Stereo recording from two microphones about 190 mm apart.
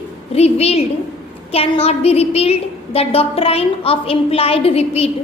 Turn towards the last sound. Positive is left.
turn(degrees=30)  # may be behind; listen again after turning